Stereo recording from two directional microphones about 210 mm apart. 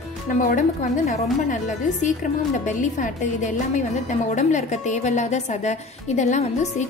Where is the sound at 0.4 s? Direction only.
40° left (ahead or behind).